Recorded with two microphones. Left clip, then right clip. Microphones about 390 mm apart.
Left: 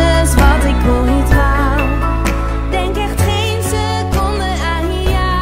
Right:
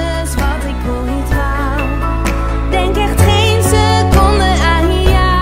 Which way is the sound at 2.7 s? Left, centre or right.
Right.